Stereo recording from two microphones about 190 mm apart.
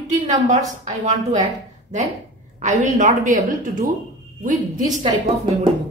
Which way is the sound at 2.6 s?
40° right (ahead or behind).